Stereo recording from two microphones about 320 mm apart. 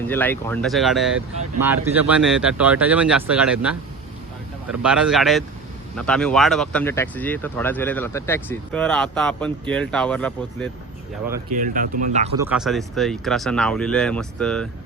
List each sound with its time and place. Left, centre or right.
0.1 s speech: centre
11.5 s speech: right
12.4 s speech: centre